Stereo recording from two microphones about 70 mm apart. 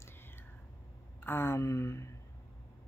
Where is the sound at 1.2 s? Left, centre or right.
Left.